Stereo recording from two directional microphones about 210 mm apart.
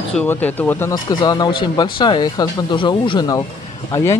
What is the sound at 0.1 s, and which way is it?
Speech, 10° left (ahead or behind).